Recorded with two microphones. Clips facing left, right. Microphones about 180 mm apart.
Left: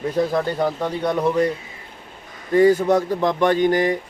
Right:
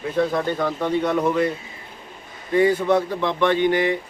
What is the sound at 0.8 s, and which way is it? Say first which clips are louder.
Speech: right 2 dB; 35° left (ahead or behind).